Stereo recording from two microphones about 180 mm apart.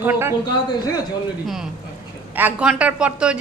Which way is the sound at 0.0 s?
10° right (ahead or behind).